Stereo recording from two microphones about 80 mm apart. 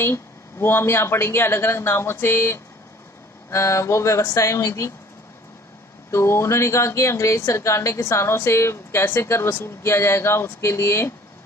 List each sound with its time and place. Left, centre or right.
0.0 s speech: left
6.1 s speech: left